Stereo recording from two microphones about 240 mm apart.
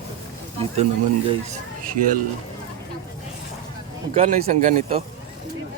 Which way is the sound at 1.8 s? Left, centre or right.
Right.